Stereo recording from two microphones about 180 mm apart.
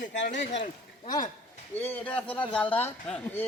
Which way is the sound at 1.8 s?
10° left (ahead or behind).